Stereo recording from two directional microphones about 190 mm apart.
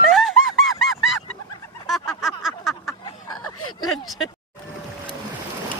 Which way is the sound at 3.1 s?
20° left (ahead or behind).